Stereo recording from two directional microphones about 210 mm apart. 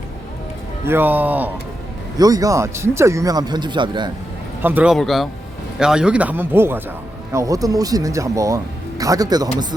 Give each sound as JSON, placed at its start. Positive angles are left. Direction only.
{"t": 0.9, "sound": "speech", "side_deg": -10}
{"t": 4.6, "sound": "a man's voice", "side_deg": -5}